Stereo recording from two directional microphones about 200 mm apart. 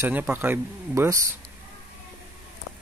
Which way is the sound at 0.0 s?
10° right (ahead or behind).